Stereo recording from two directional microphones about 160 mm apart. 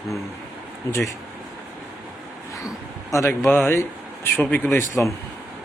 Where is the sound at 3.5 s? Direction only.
10° left (ahead or behind).